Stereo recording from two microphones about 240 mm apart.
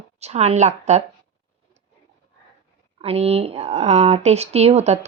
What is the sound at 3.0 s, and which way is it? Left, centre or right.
Speech, right.